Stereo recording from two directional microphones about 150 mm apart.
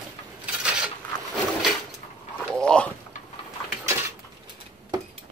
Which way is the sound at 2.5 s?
5° left (ahead or behind).